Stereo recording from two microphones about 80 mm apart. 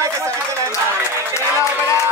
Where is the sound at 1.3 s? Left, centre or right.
Left.